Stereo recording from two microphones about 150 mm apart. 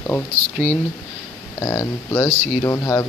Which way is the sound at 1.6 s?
20° left (ahead or behind).